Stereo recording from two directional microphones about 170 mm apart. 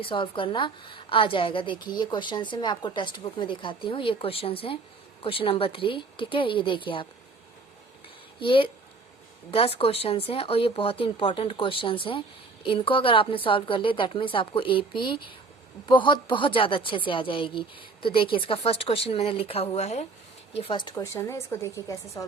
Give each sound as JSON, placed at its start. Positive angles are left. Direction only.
{"t": 0.0, "sound": "a woman's voice", "side_deg": 30}
{"t": 8.4, "sound": "a woman's voice", "side_deg": 30}